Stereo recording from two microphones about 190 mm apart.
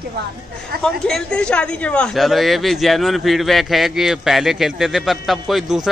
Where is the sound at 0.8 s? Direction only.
Centre (ahead or behind).